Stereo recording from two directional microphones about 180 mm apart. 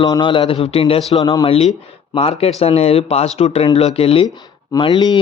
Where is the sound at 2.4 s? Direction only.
35° left (ahead or behind).